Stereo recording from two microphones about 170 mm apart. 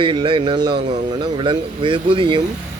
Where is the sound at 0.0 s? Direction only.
30° right (ahead or behind).